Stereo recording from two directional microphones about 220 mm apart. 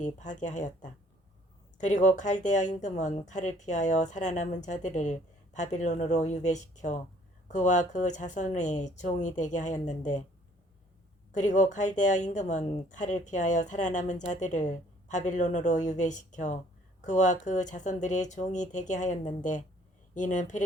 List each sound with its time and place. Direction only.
0.0 s speech: 35° left (ahead or behind)
11.3 s speech: 35° left (ahead or behind)